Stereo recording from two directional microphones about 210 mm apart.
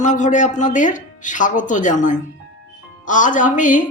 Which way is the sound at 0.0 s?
35° left (ahead or behind).